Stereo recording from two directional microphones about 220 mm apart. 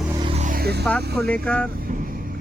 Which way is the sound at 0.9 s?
5° left (ahead or behind).